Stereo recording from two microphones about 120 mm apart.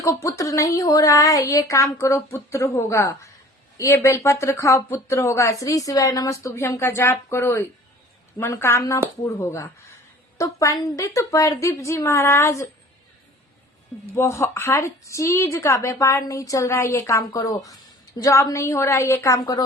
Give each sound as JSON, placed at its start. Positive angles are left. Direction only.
{"t": 0.0, "sound": "speech", "side_deg": 25}
{"t": 14.2, "sound": "speech", "side_deg": 25}